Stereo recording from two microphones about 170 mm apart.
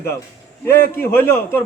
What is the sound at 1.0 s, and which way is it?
Child singing, 15° left (ahead or behind).